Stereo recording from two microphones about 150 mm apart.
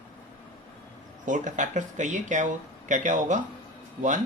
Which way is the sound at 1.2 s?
55° right (ahead or behind).